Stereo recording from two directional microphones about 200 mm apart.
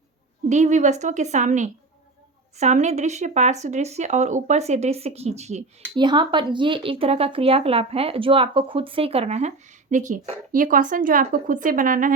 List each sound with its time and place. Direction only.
0.4 s speech: 35° right (ahead or behind)
6.0 s speech: 25° right (ahead or behind); by 12.1 s 40° right (ahead or behind)